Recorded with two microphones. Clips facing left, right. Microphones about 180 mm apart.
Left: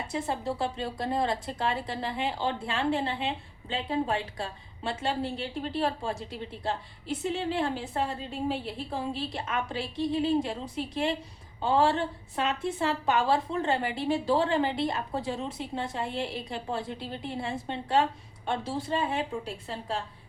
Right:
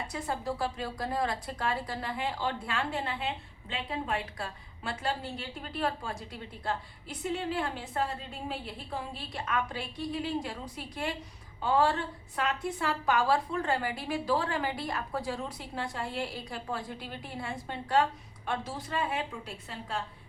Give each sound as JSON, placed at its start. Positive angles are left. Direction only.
{"t": 0.1, "sound": "a woman's voice", "side_deg": 25}